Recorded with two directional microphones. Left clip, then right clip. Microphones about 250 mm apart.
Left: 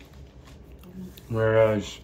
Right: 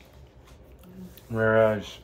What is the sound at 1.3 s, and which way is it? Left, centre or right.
Speech, centre.